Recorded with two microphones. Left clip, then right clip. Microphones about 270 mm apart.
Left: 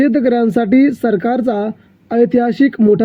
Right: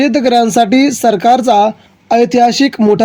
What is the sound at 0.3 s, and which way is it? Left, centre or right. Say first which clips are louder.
Speech: right 5 dB; centre.